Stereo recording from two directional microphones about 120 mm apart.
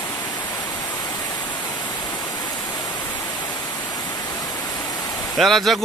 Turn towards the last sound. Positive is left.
turn(degrees=0)  # may be behind; listen again after turning